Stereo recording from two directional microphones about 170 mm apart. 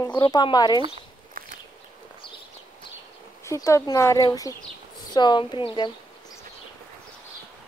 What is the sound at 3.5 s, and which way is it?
Speech, 15° left (ahead or behind).